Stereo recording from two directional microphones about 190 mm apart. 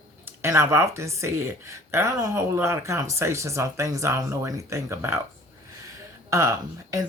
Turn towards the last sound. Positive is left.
turn(degrees=-15)  # may be behind; listen again after turning